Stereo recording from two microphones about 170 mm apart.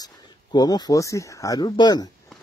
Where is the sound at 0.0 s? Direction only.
25° left (ahead or behind).